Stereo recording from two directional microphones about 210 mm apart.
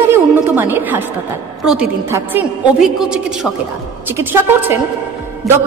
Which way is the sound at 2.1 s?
5° right (ahead or behind).